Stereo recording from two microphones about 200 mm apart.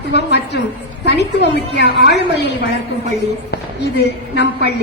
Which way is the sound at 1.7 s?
60° left (ahead or behind).